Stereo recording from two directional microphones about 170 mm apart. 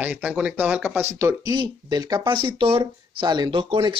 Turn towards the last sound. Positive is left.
turn(degrees=-25)  # may be behind; listen again after turning